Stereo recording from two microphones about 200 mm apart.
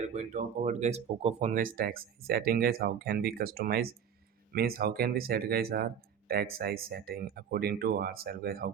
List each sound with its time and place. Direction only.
0.0 s speech: 35° right (ahead or behind)